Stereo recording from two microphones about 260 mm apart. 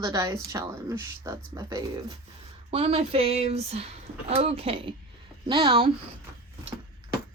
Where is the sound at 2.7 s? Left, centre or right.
Right.